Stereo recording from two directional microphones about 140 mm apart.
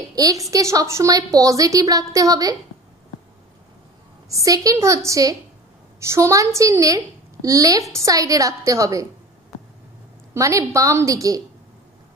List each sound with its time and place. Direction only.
0.1 s a woman's voice: 25° right (ahead or behind)
4.3 s a woman's voice: 25° right (ahead or behind)
10.3 s a woman's voice: 20° right (ahead or behind)